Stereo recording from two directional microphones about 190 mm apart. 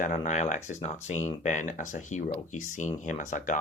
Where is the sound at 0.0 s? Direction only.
40° left (ahead or behind).